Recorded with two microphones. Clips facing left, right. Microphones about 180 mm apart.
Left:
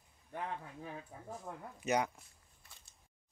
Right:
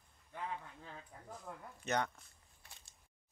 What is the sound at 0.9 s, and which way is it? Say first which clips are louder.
Speech: left 5 dB; 35° left (ahead or behind).